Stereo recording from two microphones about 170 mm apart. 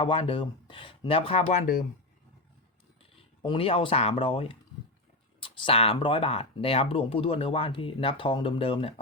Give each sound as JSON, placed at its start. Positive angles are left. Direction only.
{"t": 0.0, "sound": "speech", "side_deg": 30}
{"t": 1.5, "sound": "speech", "side_deg": 50}
{"t": 3.0, "sound": "speech", "side_deg": 30}